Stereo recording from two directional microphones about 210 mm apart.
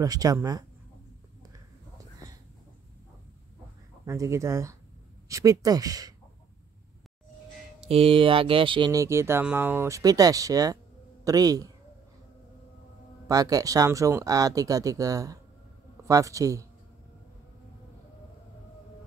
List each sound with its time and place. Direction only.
0.0 s speech: 15° right (ahead or behind)
4.0 s speech: 15° right (ahead or behind)
7.9 s speech: 25° right (ahead or behind)
13.3 s speech: 15° right (ahead or behind)